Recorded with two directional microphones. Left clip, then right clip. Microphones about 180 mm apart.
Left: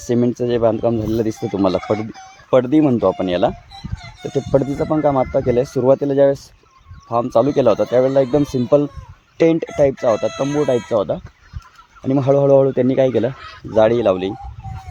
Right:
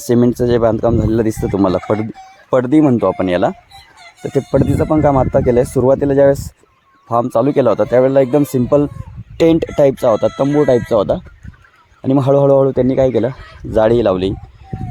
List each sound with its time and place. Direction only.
0.0 s speech: 35° right (ahead or behind)
4.4 s speech: 40° right (ahead or behind)
12.0 s speech: 40° right (ahead or behind)
13.7 s speech: 40° right (ahead or behind)